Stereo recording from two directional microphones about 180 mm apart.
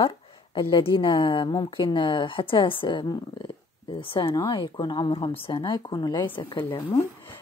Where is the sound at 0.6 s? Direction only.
25° left (ahead or behind).